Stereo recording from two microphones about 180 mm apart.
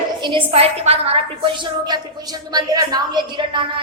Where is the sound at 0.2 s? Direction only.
25° right (ahead or behind).